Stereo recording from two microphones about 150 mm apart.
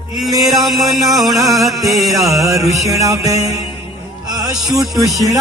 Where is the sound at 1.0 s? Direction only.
Centre (ahead or behind).